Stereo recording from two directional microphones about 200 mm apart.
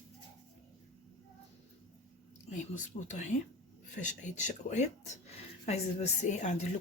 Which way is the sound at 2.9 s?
35° left (ahead or behind).